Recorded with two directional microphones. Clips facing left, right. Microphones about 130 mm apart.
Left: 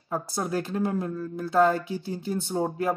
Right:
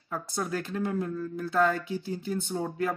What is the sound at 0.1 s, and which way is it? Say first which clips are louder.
A woman's voice: left 3 dB; 35° left (ahead or behind).